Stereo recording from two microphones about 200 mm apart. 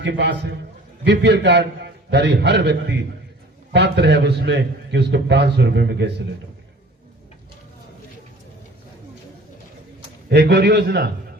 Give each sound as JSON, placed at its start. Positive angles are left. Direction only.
{"t": 0.0, "sound": "a man's voice", "side_deg": -60}
{"t": 10.2, "sound": "a man's voice", "side_deg": -55}